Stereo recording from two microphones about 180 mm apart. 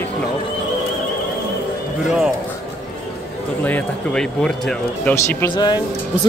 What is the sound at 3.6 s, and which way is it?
Speech, 10° left (ahead or behind).